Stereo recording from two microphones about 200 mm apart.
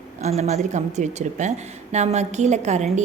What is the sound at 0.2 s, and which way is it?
A woman's voice, 35° right (ahead or behind).